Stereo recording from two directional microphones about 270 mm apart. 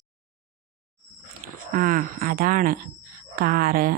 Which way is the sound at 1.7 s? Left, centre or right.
Right.